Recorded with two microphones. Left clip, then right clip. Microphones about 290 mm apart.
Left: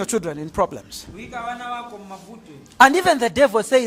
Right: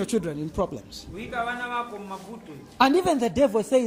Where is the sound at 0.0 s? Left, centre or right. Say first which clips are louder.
Left 3 dB; centre.